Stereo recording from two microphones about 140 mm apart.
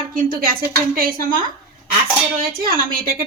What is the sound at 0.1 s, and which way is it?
Speech, 90° right.